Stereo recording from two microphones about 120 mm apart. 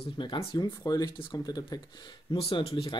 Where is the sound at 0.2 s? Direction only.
40° left (ahead or behind).